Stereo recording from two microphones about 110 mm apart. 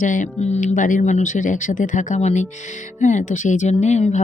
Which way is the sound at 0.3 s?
80° left.